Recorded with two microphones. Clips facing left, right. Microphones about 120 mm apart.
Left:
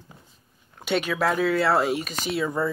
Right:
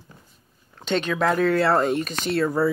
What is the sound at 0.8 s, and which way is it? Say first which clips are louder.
Speech: right 1 dB; 10° left (ahead or behind).